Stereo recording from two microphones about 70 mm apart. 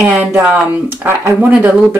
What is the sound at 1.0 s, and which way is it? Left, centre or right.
Speech, right.